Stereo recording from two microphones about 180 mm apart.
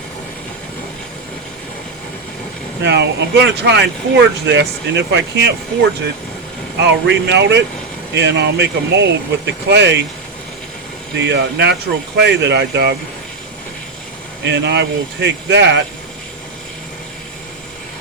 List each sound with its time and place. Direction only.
2.8 s speech: 70° right (ahead or behind)
6.8 s speech: 75° right (ahead or behind)
11.3 s speech: 70° right (ahead or behind)
14.4 s speech: 75° right (ahead or behind)